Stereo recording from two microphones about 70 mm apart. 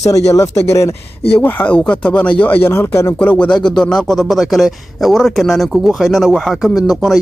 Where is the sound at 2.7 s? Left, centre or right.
Left.